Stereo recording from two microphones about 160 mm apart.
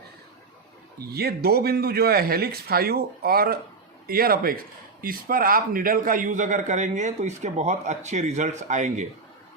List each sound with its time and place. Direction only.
1.1 s a man's voice: 75° right (ahead or behind); by 9.0 s 50° right (ahead or behind)